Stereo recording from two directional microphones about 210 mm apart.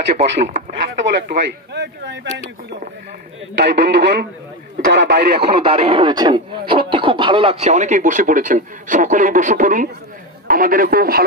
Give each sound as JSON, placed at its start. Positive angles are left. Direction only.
{"t": 0.2, "sound": "speech", "side_deg": -35}
{"t": 3.5, "sound": "speech", "side_deg": -55}
{"t": 5.6, "sound": "speech", "side_deg": -25}